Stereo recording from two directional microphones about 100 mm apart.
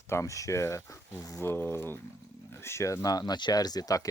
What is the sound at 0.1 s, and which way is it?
Speech, 30° left (ahead or behind).